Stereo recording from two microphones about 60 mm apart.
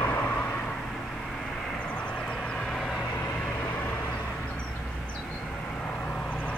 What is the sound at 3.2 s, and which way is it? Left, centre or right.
Vehicle, left.